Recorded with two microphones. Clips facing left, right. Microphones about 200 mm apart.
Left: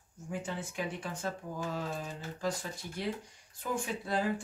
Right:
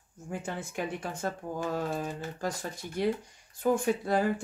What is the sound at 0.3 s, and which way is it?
Speech, 50° right (ahead or behind).